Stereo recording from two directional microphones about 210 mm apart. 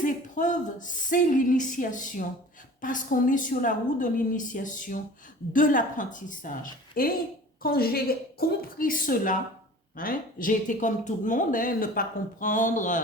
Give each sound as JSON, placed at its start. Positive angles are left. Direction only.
{"t": 0.0, "sound": "a woman's voice", "side_deg": 40}